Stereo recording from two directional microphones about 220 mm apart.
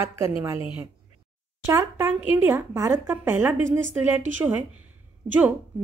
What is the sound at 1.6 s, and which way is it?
Speech, 10° right (ahead or behind).